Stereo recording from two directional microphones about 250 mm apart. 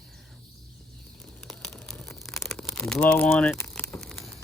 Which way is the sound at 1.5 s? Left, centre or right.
Centre.